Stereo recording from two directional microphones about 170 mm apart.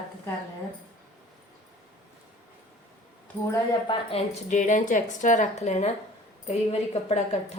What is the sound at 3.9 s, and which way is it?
Speech, 35° left (ahead or behind).